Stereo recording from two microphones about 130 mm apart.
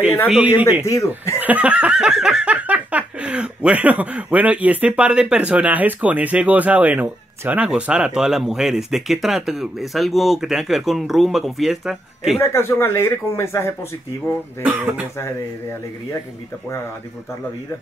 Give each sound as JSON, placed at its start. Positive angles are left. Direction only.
{"t": 0.3, "sound": "giggle", "side_deg": -10}
{"t": 0.8, "sound": "speech", "side_deg": 25}
{"t": 1.4, "sound": "giggle", "side_deg": -10}
{"t": 12.4, "sound": "speech", "side_deg": 20}
{"t": 14.6, "sound": "giggle", "side_deg": -10}